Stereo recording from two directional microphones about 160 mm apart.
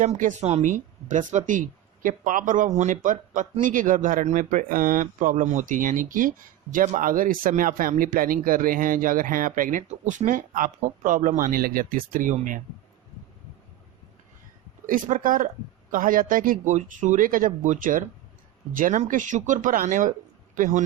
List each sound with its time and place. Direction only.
0.0 s a woman's voice: 50° right (ahead or behind)
14.8 s a woman's voice: 55° right (ahead or behind)